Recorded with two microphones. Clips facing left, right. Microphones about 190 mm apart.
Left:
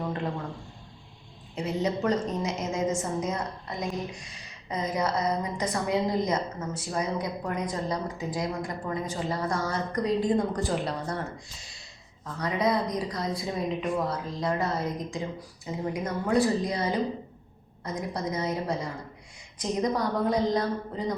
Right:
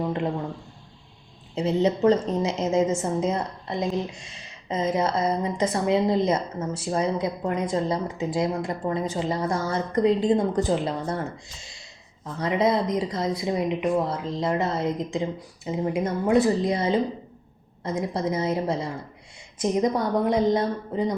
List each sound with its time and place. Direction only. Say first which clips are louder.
1.5 s a woman's voice: right 6 dB; 25° right (ahead or behind)
12.4 s a woman's voice: right 4 dB; 25° right (ahead or behind)